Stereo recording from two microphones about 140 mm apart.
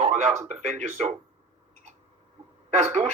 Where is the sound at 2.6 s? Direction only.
55° right (ahead or behind).